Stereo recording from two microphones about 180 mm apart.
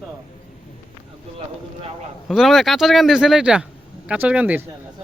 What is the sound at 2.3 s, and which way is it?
Speech, centre (ahead or behind).